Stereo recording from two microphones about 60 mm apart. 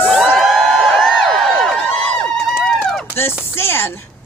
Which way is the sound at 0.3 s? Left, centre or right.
Centre.